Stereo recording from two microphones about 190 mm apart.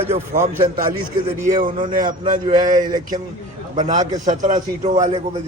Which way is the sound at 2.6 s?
20° right (ahead or behind).